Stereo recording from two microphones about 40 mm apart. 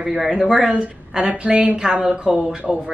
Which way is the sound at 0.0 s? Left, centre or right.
Centre.